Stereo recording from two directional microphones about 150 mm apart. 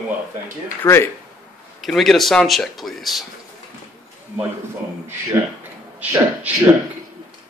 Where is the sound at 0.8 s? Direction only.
15° left (ahead or behind).